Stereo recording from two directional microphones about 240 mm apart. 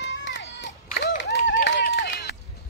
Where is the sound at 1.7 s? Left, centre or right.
Left.